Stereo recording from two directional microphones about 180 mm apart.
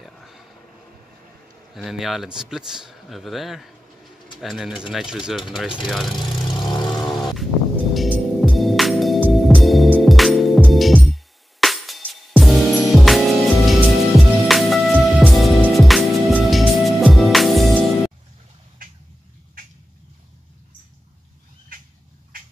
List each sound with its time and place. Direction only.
0.0 s a sound: centre (ahead or behind)
1.7 s speech: centre (ahead or behind)
6.2 s vehicle: 25° left (ahead or behind)
7.1 s vehicle: centre (ahead or behind)
7.9 s music: centre (ahead or behind)